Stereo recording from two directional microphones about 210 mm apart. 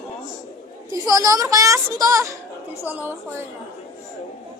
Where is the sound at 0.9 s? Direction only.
15° right (ahead or behind).